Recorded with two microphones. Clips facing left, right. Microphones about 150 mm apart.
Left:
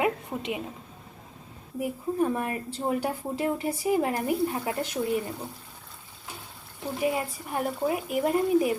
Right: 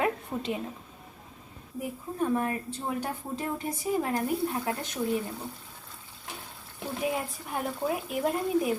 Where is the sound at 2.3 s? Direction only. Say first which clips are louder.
Right 1 dB; 5° left (ahead or behind).